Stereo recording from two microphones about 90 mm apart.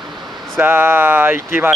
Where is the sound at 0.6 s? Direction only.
20° right (ahead or behind).